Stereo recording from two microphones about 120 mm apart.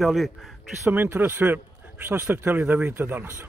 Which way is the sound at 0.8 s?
15° right (ahead or behind).